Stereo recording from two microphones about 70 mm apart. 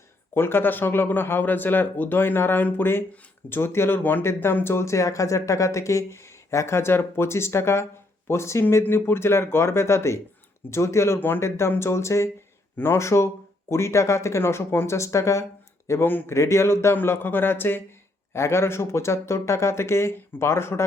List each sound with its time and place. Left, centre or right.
0.3 s a man's voice: left
15.9 s speech: left
16.3 s speech: left
18.3 s speech: left